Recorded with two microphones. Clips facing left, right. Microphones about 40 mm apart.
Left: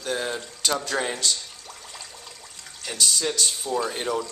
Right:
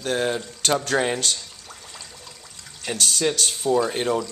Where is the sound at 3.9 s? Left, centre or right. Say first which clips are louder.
Right 4 dB; right.